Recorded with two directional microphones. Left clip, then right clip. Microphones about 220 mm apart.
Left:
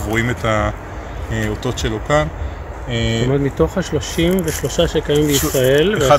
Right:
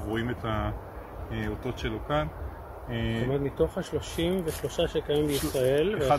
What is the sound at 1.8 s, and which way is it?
Speech, 25° left (ahead or behind).